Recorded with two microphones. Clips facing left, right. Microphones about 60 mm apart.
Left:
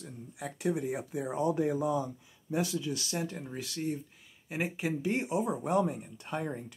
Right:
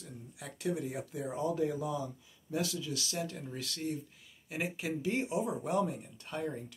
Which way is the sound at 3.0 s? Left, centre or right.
Left.